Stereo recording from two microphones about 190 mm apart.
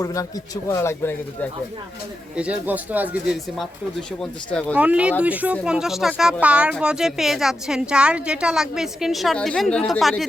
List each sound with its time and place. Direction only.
0.0 s speech: 20° left (ahead or behind)
2.3 s speech: 5° right (ahead or behind)
4.7 s speech: 10° right (ahead or behind)